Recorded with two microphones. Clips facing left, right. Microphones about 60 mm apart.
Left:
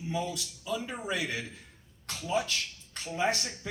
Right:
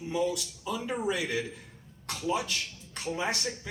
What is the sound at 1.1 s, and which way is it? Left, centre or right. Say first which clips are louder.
Speech: right 2 dB; left.